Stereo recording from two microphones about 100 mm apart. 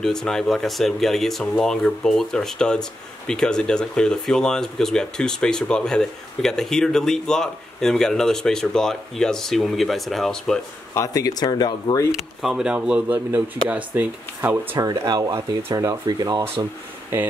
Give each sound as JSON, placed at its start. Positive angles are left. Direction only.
{"t": 0.0, "sound": "speech", "side_deg": 5}
{"t": 11.0, "sound": "speech", "side_deg": 35}
{"t": 12.4, "sound": "speech", "side_deg": -5}
{"t": 14.8, "sound": "speech", "side_deg": -40}